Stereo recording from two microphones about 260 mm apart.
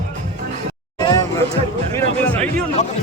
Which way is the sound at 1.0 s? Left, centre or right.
Centre.